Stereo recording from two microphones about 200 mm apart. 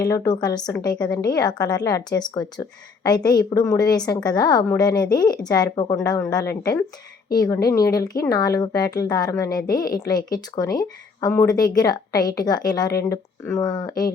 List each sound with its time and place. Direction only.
0.0 s a woman's voice: 15° left (ahead or behind)